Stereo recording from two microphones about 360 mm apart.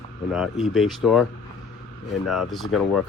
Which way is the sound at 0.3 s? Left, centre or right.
Centre.